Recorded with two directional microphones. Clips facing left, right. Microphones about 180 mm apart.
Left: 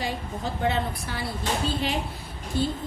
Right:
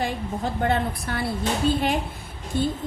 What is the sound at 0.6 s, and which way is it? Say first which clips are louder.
Speech: right 2 dB; 55° right (ahead or behind).